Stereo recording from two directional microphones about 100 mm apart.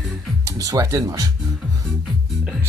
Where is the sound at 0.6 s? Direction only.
35° right (ahead or behind).